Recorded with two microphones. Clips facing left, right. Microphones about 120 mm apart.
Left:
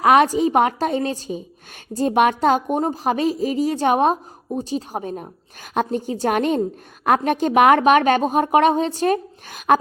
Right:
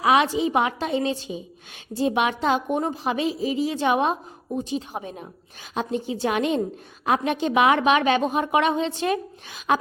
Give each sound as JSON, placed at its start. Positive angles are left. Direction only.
{"t": 0.0, "sound": "a woman's voice", "side_deg": 50}